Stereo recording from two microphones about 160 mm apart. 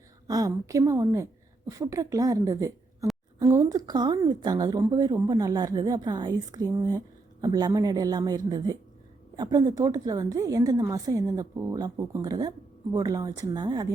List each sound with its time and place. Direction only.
0.3 s a woman's voice: 20° right (ahead or behind)